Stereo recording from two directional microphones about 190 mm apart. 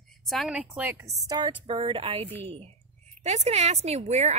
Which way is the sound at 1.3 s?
25° right (ahead or behind).